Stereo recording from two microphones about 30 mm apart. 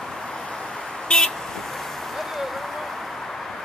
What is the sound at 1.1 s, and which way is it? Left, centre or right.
Vehicle, left.